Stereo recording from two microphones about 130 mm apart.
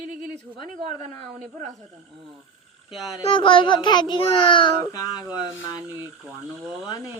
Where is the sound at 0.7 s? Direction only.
75° right (ahead or behind).